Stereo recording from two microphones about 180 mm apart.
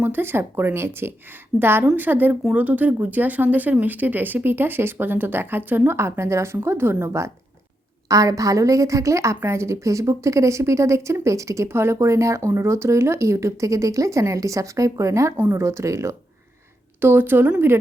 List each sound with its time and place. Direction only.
0.0 s a woman's voice: 10° right (ahead or behind)